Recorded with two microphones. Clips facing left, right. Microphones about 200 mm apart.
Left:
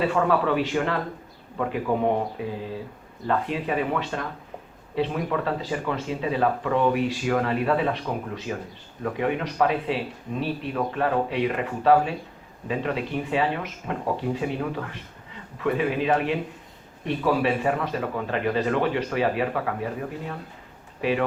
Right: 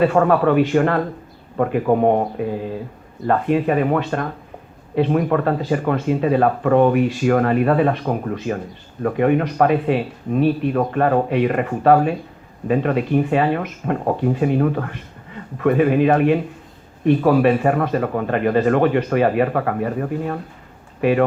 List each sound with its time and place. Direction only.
0.0 s speech: 50° right (ahead or behind)